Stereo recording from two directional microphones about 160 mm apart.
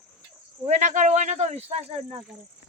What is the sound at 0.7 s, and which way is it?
Speech, 50° right (ahead or behind).